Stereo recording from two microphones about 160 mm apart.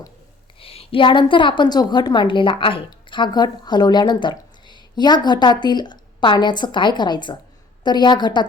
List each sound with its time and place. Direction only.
0.6 s a woman's voice: 35° left (ahead or behind)